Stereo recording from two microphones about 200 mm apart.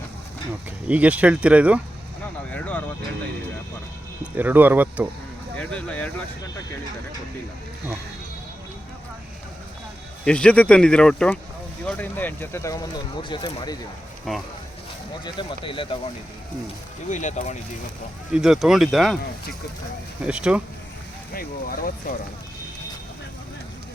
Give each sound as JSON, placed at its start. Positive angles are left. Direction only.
{"t": 0.9, "sound": "speech", "side_deg": -5}
{"t": 2.5, "sound": "vehicle", "side_deg": 5}
{"t": 4.4, "sound": "speech", "side_deg": -10}
{"t": 5.5, "sound": "speech", "side_deg": 5}
{"t": 10.2, "sound": "speech", "side_deg": 5}
{"t": 14.3, "sound": "speech", "side_deg": 0}
{"t": 15.2, "sound": "speech", "side_deg": 25}
{"t": 17.1, "sound": "speech", "side_deg": 35}
{"t": 18.3, "sound": "speech", "side_deg": -5}
{"t": 20.2, "sound": "speech", "side_deg": -5}
{"t": 21.3, "sound": "speech", "side_deg": 45}